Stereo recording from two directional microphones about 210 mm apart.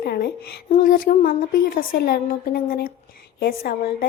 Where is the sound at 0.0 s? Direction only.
50° left (ahead or behind).